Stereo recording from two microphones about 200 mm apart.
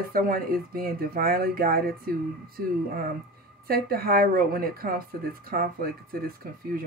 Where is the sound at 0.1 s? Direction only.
45° right (ahead or behind).